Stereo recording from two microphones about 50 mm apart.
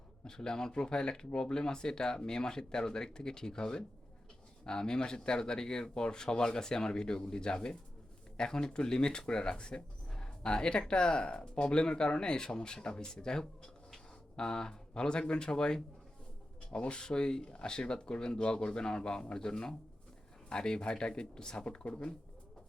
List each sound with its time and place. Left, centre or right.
0.3 s speech: centre